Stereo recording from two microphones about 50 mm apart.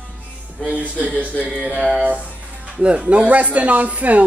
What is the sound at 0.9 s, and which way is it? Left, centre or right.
Speech, right.